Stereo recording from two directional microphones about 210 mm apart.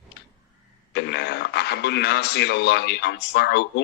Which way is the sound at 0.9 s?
55° left (ahead or behind).